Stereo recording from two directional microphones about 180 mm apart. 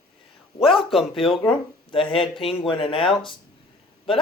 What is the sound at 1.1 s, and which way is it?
Speech, 30° left (ahead or behind).